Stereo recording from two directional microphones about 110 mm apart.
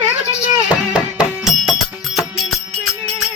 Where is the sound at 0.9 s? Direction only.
10° right (ahead or behind).